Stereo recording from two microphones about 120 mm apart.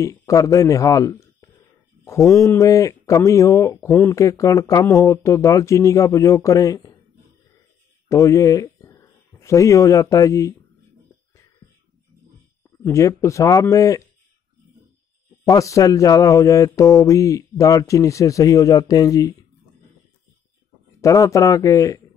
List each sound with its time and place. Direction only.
0.3 s a man's voice: 30° left (ahead or behind)
8.1 s a sound: 25° left (ahead or behind)
9.4 s speech: 25° left (ahead or behind)
12.8 s speech: 25° left (ahead or behind)
15.4 s speech: 25° left (ahead or behind)
21.0 s speech: 25° left (ahead or behind)